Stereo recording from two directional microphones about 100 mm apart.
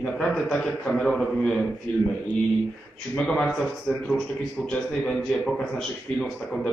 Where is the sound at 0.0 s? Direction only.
5° left (ahead or behind).